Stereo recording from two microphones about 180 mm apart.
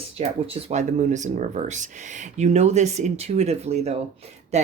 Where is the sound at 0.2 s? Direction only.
35° right (ahead or behind).